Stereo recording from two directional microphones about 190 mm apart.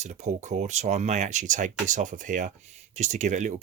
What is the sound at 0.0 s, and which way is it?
Speech, 40° right (ahead or behind).